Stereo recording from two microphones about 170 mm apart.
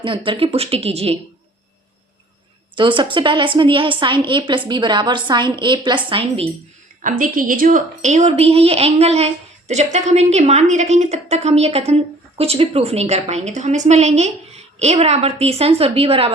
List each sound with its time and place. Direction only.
0.0 s speech: 30° right (ahead or behind)
2.7 s a woman's voice: 30° right (ahead or behind)
7.0 s speech: 55° right (ahead or behind); by 16.3 s 35° right (ahead or behind)